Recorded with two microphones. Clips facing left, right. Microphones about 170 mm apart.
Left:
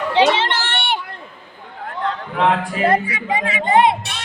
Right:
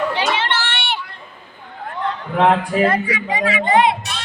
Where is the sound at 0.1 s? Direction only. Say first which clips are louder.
Left 5 dB; 20° left (ahead or behind).